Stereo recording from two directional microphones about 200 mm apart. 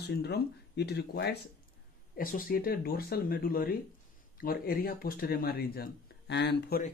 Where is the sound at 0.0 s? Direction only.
55° left (ahead or behind).